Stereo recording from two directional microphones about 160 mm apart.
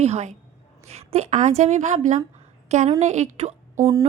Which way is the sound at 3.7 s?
20° right (ahead or behind).